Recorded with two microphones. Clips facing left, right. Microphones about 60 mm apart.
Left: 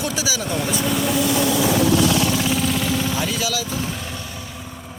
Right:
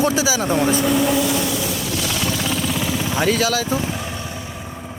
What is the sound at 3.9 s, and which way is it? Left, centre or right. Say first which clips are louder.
Vehicle: right 3 dB; centre.